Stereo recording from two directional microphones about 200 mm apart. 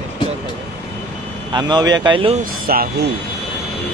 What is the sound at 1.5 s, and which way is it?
Speech, 20° right (ahead or behind).